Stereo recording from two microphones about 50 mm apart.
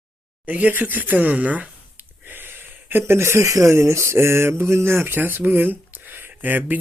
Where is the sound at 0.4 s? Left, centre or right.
Right.